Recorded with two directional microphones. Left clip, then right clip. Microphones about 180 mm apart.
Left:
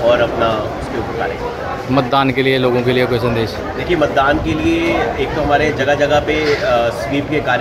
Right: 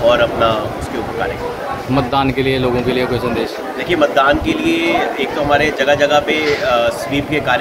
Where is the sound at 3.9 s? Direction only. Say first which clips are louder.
Right 1 dB; 15° right (ahead or behind).